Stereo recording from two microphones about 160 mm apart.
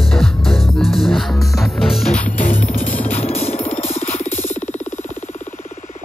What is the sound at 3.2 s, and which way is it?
Music, 40° left (ahead or behind).